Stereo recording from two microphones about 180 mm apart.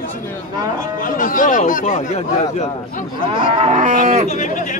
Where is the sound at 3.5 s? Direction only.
40° right (ahead or behind).